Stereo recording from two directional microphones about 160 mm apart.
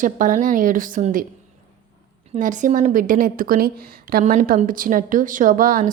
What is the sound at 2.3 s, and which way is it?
A woman's voice, 50° right (ahead or behind).